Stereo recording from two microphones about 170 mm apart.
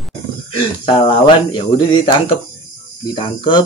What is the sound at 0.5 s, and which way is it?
Speech, 30° left (ahead or behind).